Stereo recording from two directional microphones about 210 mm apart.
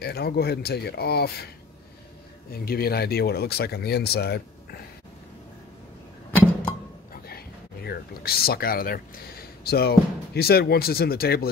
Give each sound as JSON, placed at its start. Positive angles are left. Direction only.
{"t": 0.0, "sound": "speech", "side_deg": 50}
{"t": 2.5, "sound": "speech", "side_deg": 45}
{"t": 7.2, "sound": "speech", "side_deg": 50}